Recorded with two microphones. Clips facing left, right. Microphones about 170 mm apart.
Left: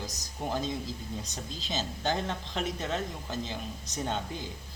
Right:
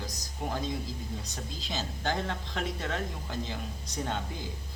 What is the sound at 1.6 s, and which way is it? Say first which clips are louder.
Speech: left 2 dB; 25° left (ahead or behind).